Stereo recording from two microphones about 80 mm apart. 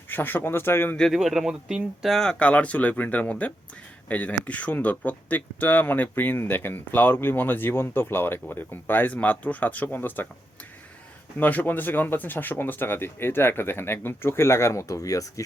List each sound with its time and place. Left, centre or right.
0.1 s speech: left
0.9 s speech: centre
2.1 s speech: centre
11.3 s speech: left